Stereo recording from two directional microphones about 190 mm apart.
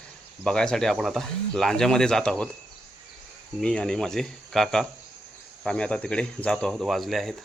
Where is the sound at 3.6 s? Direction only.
5° left (ahead or behind).